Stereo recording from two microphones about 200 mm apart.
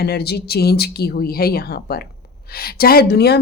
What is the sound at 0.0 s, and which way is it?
Speech, 50° left (ahead or behind).